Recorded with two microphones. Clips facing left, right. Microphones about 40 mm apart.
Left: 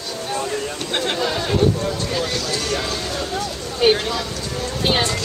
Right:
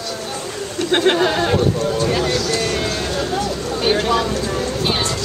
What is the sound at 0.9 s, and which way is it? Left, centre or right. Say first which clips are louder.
Speech: right 7 dB; right.